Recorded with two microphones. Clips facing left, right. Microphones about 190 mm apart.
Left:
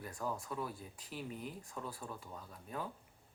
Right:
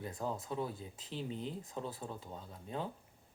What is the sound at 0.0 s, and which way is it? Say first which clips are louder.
Speech: right 2 dB; 25° right (ahead or behind).